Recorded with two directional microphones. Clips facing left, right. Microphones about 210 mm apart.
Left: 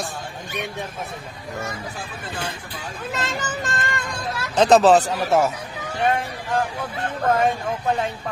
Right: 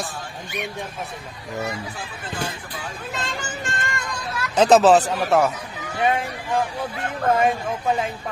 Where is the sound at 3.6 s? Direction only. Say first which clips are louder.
Left 2 dB; 35° left (ahead or behind).